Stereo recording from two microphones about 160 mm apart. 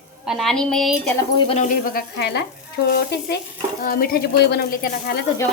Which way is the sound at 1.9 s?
80° left.